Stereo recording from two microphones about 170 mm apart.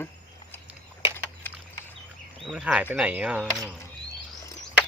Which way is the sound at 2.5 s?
5° right (ahead or behind).